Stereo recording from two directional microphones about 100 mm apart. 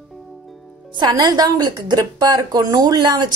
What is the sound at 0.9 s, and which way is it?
Speech, 50° right (ahead or behind).